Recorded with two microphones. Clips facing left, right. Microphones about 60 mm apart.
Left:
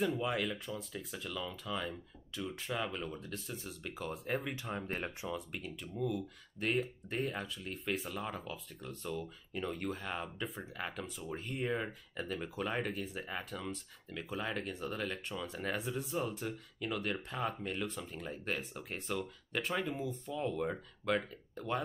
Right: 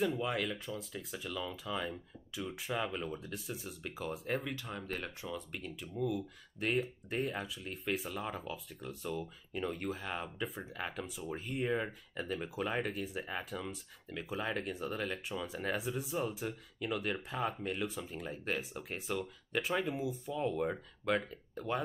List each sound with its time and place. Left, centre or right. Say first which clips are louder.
0.0 s speech: even; centre
4.6 s speech: left 2 dB; left
5.3 s speech: left 1 dB; centre